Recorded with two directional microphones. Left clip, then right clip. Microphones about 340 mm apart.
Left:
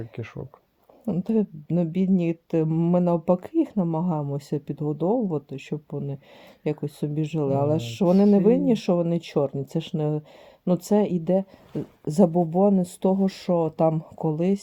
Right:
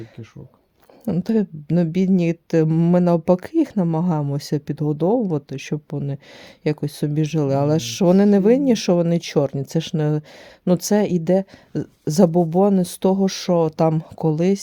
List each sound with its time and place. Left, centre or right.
1.0 s speech: right